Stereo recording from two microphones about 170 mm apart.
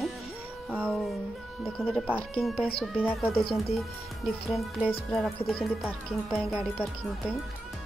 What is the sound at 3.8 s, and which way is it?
Music, centre (ahead or behind).